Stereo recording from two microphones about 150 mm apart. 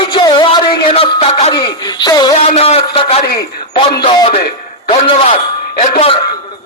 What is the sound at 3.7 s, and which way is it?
Speech, 35° left (ahead or behind).